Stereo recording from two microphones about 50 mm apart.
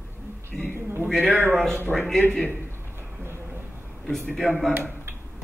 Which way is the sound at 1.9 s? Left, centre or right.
Centre.